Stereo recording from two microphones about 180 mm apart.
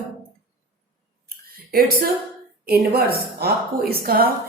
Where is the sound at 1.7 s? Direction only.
55° right (ahead or behind).